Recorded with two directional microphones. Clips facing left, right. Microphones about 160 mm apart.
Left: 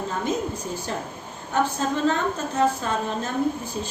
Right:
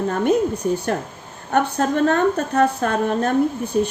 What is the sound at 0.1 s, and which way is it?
A woman's voice, 60° right (ahead or behind).